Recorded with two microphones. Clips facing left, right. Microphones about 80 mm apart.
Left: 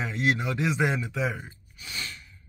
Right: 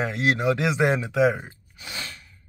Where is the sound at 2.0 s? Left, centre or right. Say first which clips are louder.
Even; right.